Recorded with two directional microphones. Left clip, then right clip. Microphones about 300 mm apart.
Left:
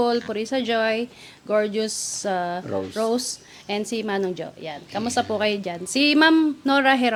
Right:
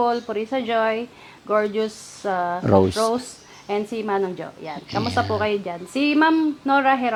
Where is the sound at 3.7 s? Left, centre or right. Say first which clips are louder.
Right 2 dB; left.